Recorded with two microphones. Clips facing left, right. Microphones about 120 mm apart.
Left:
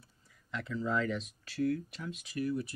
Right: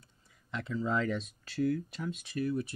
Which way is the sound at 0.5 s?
25° right (ahead or behind).